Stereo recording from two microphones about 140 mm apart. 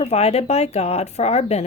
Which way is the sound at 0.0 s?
50° left (ahead or behind).